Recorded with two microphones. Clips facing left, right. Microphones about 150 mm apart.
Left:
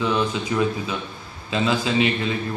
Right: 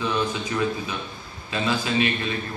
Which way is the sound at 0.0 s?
20° left (ahead or behind).